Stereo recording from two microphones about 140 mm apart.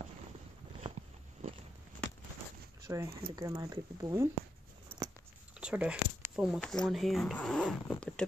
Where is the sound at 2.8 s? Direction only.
20° right (ahead or behind).